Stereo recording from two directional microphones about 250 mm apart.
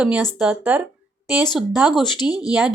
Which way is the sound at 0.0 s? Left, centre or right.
Centre.